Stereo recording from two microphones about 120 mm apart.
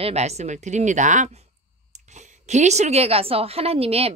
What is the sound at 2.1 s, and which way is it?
A woman's voice, 75° right (ahead or behind).